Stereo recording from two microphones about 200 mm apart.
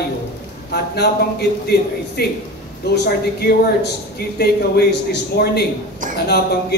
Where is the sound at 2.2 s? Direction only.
50° left (ahead or behind).